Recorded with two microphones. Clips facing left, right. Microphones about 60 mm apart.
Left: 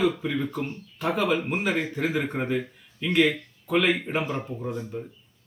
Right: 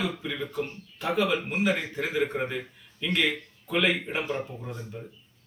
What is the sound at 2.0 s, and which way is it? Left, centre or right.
Speech, centre.